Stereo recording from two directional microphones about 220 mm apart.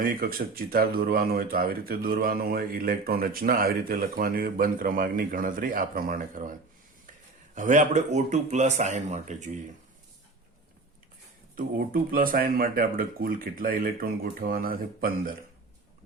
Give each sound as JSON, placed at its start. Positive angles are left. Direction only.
{"t": 0.0, "sound": "speech", "side_deg": -40}
{"t": 11.5, "sound": "speech", "side_deg": -40}